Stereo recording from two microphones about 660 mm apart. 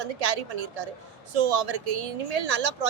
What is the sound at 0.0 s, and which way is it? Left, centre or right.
Speech, right.